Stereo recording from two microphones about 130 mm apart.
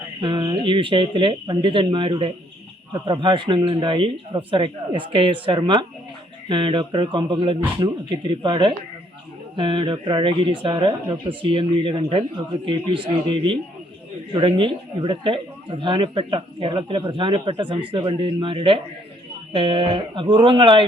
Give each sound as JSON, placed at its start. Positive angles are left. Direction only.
{"t": 0.2, "sound": "speech", "side_deg": -35}